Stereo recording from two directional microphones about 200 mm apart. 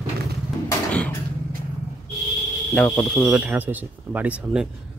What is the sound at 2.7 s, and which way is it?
Speech, 5° left (ahead or behind).